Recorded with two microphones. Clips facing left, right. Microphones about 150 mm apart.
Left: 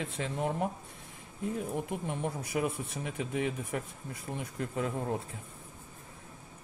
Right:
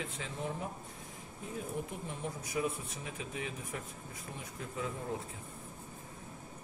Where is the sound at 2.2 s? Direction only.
60° left (ahead or behind).